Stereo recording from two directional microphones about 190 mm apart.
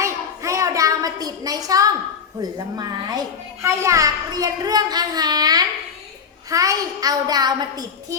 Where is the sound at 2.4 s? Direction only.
20° right (ahead or behind).